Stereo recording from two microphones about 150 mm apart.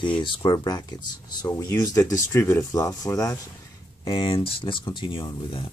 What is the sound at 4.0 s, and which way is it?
Speech, 35° left (ahead or behind).